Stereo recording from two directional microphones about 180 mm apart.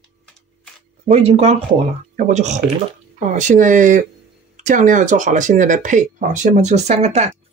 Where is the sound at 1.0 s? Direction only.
35° right (ahead or behind).